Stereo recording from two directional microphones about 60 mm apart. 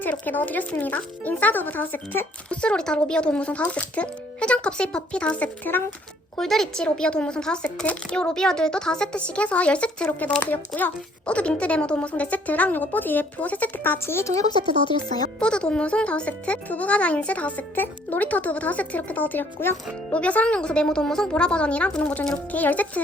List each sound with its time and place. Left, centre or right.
0.1 s a child's voice: left
2.6 s a child's voice: centre
5.7 s speech: left
6.3 s a child's voice: centre; by 14.0 s left
14.0 s a woman's voice: left
15.4 s a child's voice: centre; by 19.7 s left
20.1 s a child's voice: left